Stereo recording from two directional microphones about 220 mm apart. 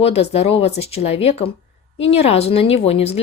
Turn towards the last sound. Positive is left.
turn(degrees=30)  # may be behind; listen again after turning